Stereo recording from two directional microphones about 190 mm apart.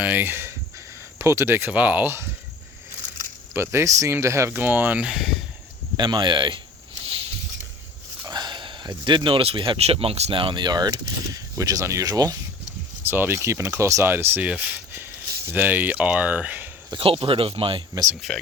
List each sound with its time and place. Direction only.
0.0 s speech: 10° right (ahead or behind)
3.5 s speech: 15° right (ahead or behind)
6.0 s speech: 25° right (ahead or behind)
8.3 s speech: 20° right (ahead or behind)
16.9 s speech: 30° right (ahead or behind)
18.1 s speech: centre (ahead or behind)